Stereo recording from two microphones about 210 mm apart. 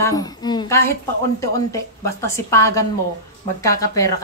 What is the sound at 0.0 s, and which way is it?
A woman's voice, 15° left (ahead or behind).